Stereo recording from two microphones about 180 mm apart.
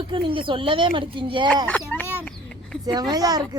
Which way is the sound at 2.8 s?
20° right (ahead or behind).